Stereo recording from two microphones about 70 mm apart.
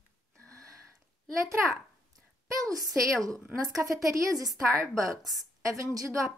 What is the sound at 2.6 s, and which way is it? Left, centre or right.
A woman's voice, right.